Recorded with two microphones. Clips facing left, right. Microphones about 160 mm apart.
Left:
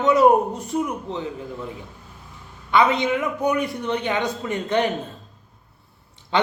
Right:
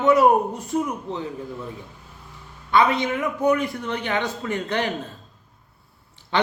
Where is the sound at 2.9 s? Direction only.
20° left (ahead or behind).